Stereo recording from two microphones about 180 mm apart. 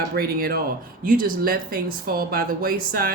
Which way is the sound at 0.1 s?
55° right (ahead or behind).